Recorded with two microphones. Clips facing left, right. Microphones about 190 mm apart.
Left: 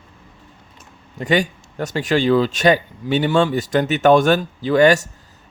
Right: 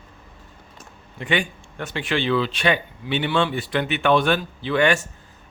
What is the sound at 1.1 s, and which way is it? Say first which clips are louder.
Speech: left 6 dB; 40° left (ahead or behind).